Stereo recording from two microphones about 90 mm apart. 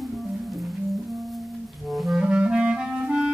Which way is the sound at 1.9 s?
Centre (ahead or behind).